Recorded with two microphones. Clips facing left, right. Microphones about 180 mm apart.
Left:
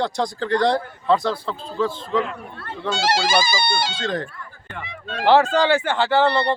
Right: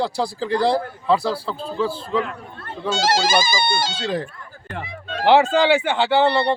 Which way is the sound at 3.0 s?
45° right (ahead or behind).